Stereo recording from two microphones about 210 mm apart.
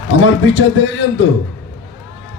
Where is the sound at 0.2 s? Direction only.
65° left (ahead or behind).